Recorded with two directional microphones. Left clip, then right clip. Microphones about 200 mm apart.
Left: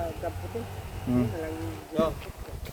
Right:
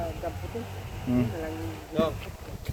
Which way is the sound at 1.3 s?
40° right (ahead or behind).